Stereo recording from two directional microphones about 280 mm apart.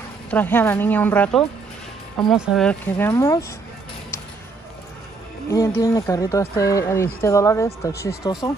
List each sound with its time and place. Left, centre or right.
0.3 s speech: centre
5.5 s speech: centre